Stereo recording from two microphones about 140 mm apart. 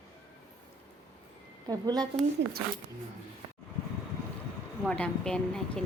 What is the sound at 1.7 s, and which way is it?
Speech, 30° right (ahead or behind).